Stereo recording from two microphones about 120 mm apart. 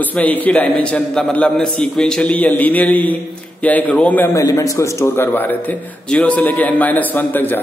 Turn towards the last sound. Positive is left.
turn(degrees=15)  # may be behind; listen again after turning